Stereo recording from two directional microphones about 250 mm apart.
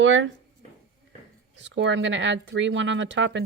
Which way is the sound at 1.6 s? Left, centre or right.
Right.